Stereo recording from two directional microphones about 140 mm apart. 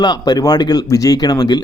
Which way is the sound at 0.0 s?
30° left (ahead or behind).